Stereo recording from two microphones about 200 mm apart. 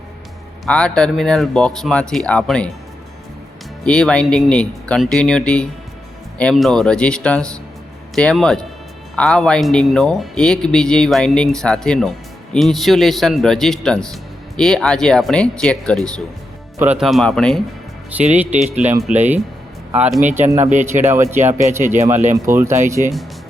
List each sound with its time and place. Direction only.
0.6 s a man's voice: 5° left (ahead or behind)
3.8 s a man's voice: 5° left (ahead or behind)
16.7 s a man's voice: 10° right (ahead or behind)
18.3 s a man's voice: 5° right (ahead or behind)
22.2 s speech: 40° right (ahead or behind)
22.5 s speech: 10° right (ahead or behind)